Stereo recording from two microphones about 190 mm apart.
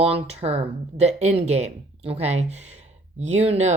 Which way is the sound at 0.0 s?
30° right (ahead or behind).